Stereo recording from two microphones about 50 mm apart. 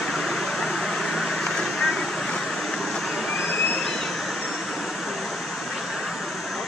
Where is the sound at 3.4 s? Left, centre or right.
Left.